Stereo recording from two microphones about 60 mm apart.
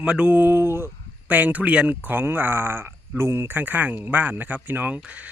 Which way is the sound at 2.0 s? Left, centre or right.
Right.